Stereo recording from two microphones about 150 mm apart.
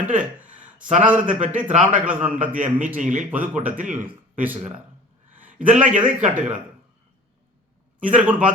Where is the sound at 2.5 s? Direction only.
60° right (ahead or behind).